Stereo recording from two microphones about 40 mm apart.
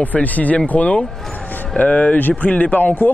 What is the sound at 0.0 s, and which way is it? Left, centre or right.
Speech, left.